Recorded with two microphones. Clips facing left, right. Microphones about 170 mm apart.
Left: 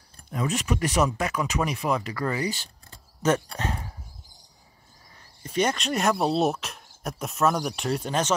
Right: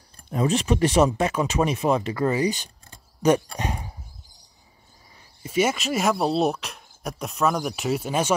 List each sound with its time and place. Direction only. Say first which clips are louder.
0.3 s speech: right 5 dB; 30° right (ahead or behind)
5.4 s speech: right 3 dB; 5° right (ahead or behind)